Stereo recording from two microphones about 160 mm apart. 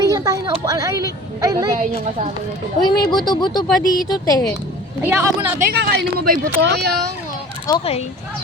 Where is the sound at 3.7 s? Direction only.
Centre (ahead or behind).